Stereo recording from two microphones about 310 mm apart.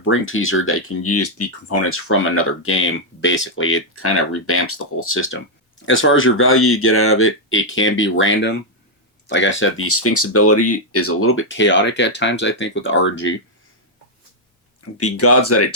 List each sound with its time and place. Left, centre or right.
0.0 s speech: left
14.9 s speech: left